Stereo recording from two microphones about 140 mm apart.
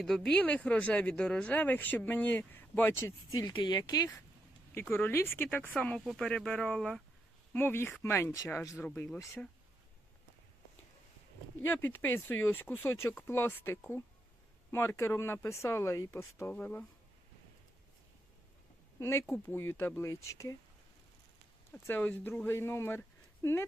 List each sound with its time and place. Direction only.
0.0 s speech: 5° left (ahead or behind)
3.3 s speech: 30° left (ahead or behind)
4.7 s speech: 15° left (ahead or behind)
7.5 s speech: 15° left (ahead or behind)
9.4 s speech: 5° left (ahead or behind)
11.6 s speech: 15° left (ahead or behind)
18.9 s speech: 20° left (ahead or behind)
21.7 s speech: 10° left (ahead or behind)